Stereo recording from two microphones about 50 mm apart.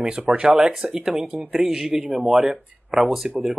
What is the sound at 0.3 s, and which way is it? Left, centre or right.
Speech, centre.